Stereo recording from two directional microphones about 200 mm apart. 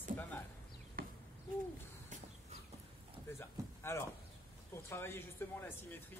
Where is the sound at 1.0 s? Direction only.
45° right (ahead or behind).